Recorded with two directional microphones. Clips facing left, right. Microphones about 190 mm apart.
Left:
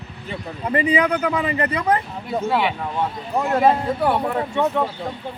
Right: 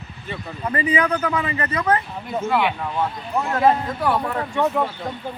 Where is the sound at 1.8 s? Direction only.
15° left (ahead or behind).